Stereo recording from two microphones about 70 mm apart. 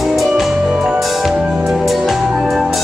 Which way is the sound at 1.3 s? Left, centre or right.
Centre.